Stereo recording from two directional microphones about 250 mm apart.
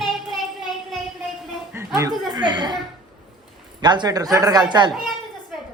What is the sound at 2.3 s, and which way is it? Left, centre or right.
Speech, centre.